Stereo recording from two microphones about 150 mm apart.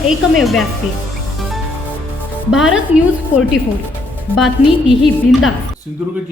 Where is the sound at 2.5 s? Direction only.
5° right (ahead or behind).